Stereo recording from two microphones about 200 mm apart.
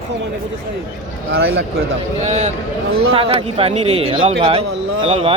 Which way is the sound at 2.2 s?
35° right (ahead or behind).